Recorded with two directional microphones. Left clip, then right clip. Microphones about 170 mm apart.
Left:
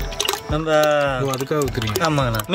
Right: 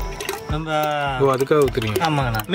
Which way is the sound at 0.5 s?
15° left (ahead or behind).